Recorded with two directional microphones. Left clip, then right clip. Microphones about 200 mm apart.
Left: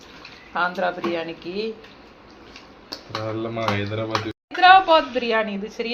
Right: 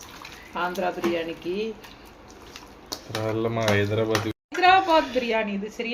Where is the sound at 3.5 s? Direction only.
50° right (ahead or behind).